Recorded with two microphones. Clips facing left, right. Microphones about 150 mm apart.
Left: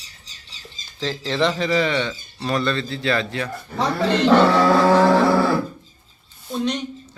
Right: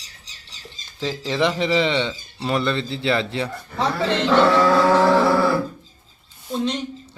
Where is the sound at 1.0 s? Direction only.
10° right (ahead or behind).